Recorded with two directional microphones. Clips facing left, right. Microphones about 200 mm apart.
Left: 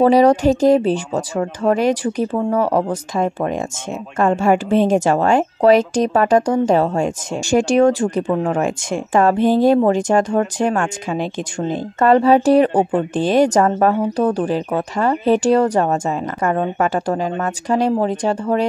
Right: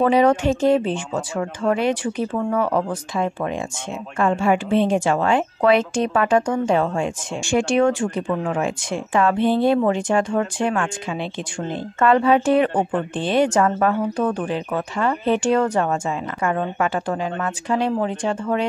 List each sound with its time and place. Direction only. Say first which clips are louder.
0.0 s a woman's voice: left 4 dB; 35° left (ahead or behind)